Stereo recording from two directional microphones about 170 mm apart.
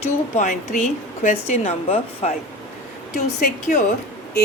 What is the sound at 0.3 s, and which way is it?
A woman's voice, 45° left (ahead or behind).